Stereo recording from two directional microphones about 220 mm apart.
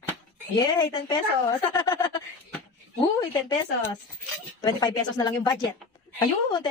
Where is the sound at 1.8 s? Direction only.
20° left (ahead or behind).